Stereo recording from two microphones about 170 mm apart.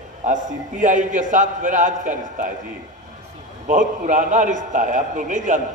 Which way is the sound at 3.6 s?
50° right (ahead or behind).